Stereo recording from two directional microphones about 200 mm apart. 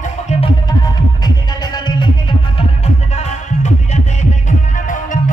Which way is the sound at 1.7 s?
20° left (ahead or behind).